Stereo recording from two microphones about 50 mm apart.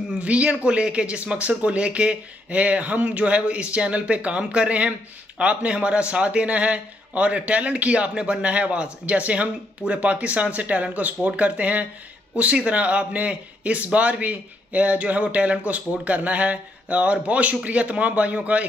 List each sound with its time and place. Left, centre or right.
0.2 s a man's voice: right